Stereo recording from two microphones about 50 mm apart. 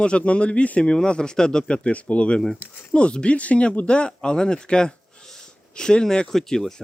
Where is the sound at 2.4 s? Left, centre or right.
Centre.